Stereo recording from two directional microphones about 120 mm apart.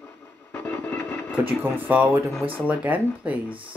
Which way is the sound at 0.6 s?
15° left (ahead or behind).